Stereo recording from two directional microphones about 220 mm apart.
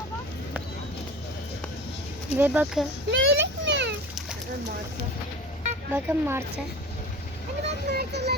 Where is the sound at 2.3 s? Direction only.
10° right (ahead or behind).